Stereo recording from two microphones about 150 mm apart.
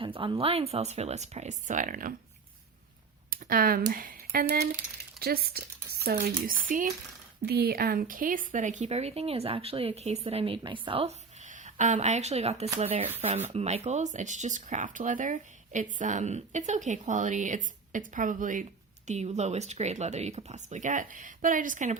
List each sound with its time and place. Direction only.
0.0 s speech: 35° right (ahead or behind); by 2.1 s 65° right (ahead or behind)
3.2 s speech: 75° right (ahead or behind)
7.4 s speech: 90° right; by 11.1 s 35° right (ahead or behind)
11.4 s speech: 55° right (ahead or behind)
19.0 s speech: 50° right (ahead or behind)